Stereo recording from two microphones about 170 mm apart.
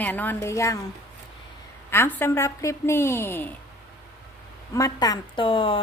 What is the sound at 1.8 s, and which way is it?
A woman's voice, 15° left (ahead or behind).